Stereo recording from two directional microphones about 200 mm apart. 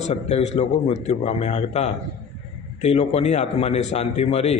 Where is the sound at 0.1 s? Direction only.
30° left (ahead or behind).